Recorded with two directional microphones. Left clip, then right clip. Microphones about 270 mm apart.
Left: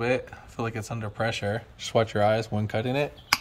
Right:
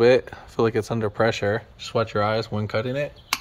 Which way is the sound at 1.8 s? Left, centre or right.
Centre.